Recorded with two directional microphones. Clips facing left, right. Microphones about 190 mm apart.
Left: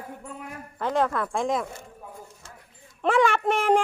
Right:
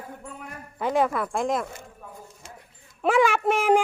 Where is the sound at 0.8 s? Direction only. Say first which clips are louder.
Right 1 dB; 10° right (ahead or behind).